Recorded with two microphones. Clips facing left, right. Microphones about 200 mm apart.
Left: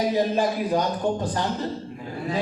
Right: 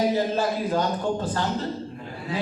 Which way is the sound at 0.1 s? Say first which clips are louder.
Left 1 dB; 15° left (ahead or behind).